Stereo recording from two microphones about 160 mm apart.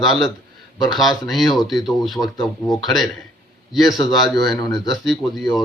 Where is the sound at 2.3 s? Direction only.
25° left (ahead or behind).